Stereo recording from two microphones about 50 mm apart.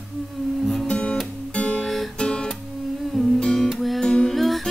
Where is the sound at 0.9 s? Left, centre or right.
Left.